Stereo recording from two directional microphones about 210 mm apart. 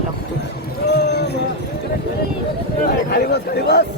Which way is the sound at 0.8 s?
55° left (ahead or behind).